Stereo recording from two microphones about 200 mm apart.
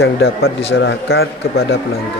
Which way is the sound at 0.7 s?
65° left (ahead or behind).